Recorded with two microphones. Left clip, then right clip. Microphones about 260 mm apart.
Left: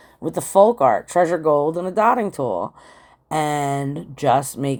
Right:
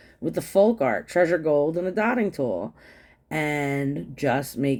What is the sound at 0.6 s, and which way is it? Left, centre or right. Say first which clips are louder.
Speech: left 6 dB; centre.